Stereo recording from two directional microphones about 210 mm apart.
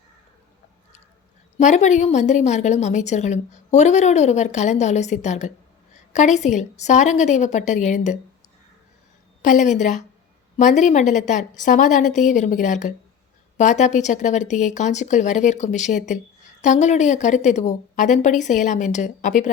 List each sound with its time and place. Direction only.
1.5 s a woman's voice: 35° left (ahead or behind)
9.4 s a woman's voice: 35° left (ahead or behind)